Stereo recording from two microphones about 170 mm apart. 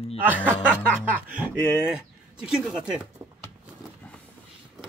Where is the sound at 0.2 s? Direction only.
10° right (ahead or behind).